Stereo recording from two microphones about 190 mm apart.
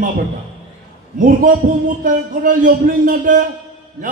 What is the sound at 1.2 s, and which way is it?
A man's voice, 45° right (ahead or behind).